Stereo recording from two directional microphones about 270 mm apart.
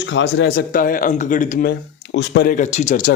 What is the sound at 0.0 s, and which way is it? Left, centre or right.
Speech, left.